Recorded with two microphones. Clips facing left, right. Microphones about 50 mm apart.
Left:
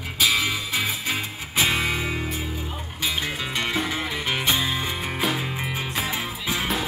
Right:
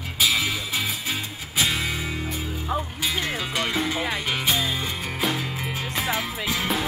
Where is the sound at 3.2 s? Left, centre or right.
Centre.